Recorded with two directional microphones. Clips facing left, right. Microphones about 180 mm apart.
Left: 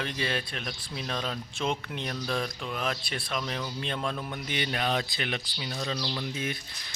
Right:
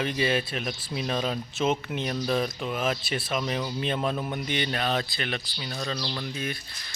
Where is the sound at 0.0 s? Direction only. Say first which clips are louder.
Right 6 dB; 5° right (ahead or behind).